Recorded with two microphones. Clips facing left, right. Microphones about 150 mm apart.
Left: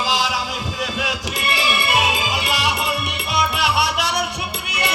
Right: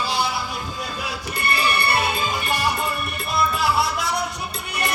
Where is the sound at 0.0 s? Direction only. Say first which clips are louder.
Left 2 dB; 90° left.